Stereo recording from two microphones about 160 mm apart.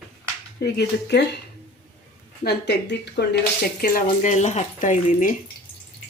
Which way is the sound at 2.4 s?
90° left.